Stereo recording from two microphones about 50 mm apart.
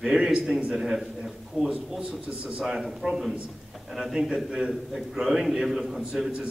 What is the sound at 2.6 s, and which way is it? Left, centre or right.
A man's voice, centre.